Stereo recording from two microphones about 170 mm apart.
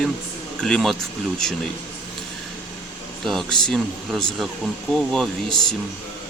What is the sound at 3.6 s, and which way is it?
Speech, 5° left (ahead or behind).